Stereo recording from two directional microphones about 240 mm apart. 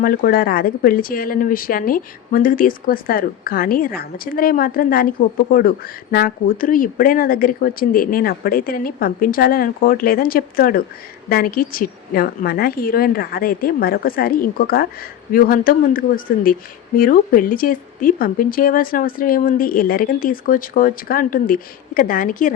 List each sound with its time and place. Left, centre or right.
0.0 s speech: left